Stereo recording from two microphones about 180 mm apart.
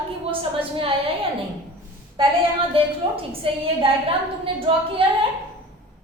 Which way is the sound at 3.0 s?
30° right (ahead or behind).